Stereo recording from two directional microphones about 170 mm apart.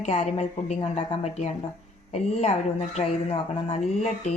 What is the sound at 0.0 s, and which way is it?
A woman's voice, 35° left (ahead or behind).